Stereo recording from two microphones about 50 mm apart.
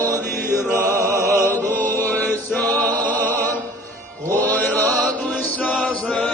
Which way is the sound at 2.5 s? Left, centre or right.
Left.